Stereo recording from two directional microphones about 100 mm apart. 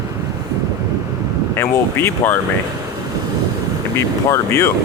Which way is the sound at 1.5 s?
25° left (ahead or behind).